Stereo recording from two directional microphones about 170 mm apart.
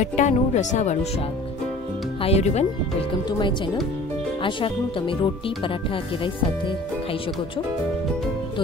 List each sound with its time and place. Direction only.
0.0 s speech: 45° left (ahead or behind)
2.2 s speech: 40° left (ahead or behind)
3.3 s speech: 25° left (ahead or behind)